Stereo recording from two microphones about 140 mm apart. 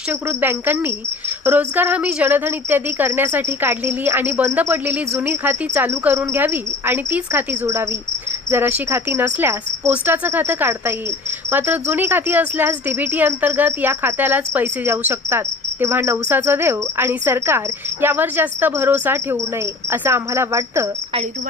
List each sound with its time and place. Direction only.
0.1 s speech: 15° right (ahead or behind)